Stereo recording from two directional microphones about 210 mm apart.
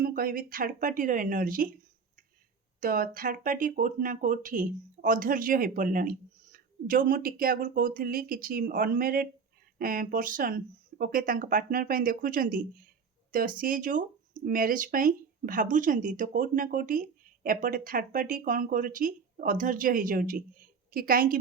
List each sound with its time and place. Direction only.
0.0 s speech: 45° right (ahead or behind)
2.8 s speech: 40° right (ahead or behind)